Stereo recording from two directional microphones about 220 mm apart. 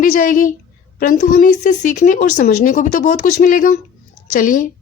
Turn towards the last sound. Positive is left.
turn(degrees=35)  # may be behind; listen again after turning